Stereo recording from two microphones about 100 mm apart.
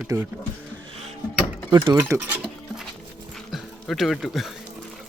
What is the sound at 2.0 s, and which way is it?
Speech, 30° right (ahead or behind).